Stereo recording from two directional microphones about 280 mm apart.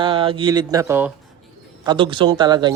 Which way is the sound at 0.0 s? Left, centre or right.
Centre.